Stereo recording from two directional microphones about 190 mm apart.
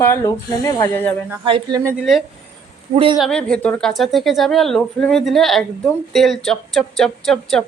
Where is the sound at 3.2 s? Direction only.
5° left (ahead or behind).